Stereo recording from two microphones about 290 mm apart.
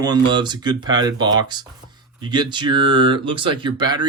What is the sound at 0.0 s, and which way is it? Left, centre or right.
Speech, centre.